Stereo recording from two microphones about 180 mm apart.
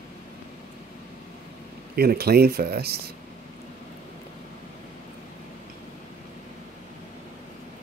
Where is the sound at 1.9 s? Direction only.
60° right (ahead or behind).